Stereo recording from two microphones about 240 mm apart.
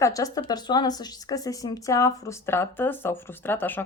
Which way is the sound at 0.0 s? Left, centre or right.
Centre.